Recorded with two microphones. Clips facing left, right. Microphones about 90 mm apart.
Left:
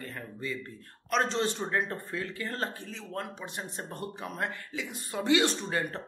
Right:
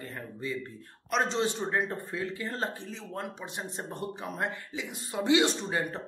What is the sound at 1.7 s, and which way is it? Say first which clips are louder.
Speech: right 1 dB; 15° right (ahead or behind).